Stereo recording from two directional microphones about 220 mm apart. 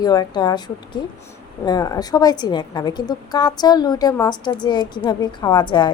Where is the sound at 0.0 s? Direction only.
20° left (ahead or behind).